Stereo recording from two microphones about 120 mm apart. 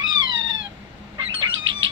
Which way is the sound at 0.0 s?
40° right (ahead or behind).